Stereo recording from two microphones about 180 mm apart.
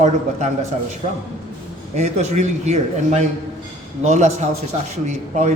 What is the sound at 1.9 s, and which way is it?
A man's voice, 40° right (ahead or behind).